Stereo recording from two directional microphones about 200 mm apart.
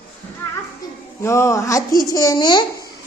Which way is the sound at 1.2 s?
15° left (ahead or behind).